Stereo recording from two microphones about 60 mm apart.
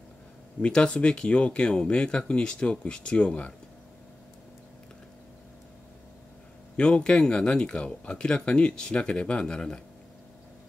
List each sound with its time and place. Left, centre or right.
0.6 s speech: centre
6.8 s speech: centre